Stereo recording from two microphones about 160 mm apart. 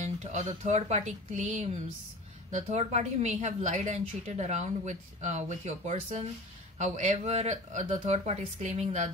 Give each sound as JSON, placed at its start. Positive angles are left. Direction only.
{"t": 0.0, "sound": "a woman's voice", "side_deg": -45}